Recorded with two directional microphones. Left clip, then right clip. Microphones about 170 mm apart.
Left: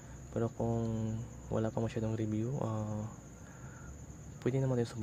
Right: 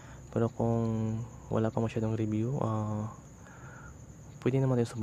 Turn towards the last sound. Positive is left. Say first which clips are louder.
# right 4 dB
turn(degrees=-15)  # may be behind; listen again after turning